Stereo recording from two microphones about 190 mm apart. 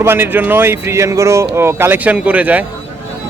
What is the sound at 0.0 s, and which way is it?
Speech, 10° right (ahead or behind).